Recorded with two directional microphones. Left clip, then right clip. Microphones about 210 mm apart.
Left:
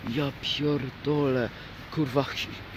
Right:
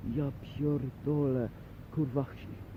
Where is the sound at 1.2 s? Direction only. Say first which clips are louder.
Left 7 dB; 15° left (ahead or behind).